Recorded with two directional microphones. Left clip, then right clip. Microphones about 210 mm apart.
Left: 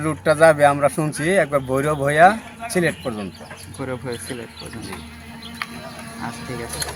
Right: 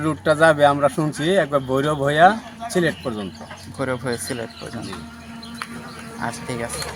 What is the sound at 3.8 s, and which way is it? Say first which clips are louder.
Speech: right 4 dB; 50° right (ahead or behind).